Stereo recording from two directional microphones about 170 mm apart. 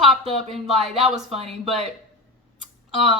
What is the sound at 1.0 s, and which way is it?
Speech, centre (ahead or behind).